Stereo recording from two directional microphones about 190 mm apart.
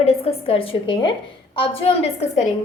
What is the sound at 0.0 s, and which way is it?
A woman's voice, 30° left (ahead or behind).